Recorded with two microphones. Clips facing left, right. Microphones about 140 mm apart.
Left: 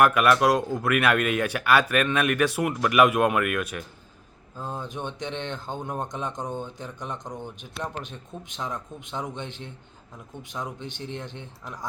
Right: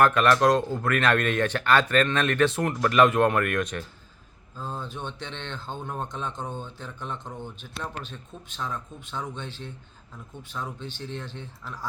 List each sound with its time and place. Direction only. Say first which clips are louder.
0.0 s speech: even; 10° left (ahead or behind)
10.8 s speech: left 1 dB; 15° left (ahead or behind)